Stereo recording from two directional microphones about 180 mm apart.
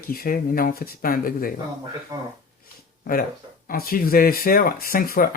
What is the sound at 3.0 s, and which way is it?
Speech, 55° left (ahead or behind).